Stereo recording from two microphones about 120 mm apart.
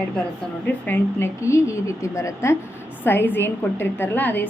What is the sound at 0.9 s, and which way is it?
A woman's voice, 20° left (ahead or behind).